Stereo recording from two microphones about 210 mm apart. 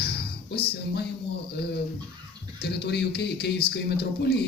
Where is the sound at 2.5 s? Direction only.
50° left (ahead or behind).